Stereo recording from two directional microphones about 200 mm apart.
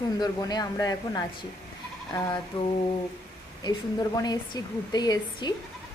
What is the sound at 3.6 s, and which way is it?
A woman's voice, 20° left (ahead or behind).